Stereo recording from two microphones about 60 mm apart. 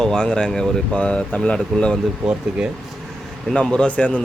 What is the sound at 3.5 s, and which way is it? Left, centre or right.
Speech, centre.